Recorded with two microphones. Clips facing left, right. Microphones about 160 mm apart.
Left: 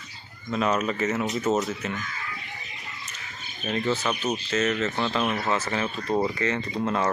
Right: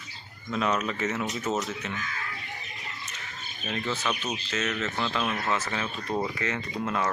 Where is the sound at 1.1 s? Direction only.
25° left (ahead or behind).